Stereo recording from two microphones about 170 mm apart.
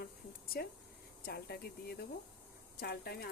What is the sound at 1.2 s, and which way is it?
Speech, 70° left (ahead or behind).